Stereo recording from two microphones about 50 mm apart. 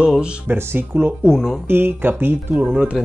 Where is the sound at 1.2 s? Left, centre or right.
Centre.